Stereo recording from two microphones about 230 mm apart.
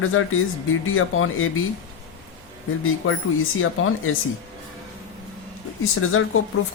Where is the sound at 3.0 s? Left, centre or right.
Left.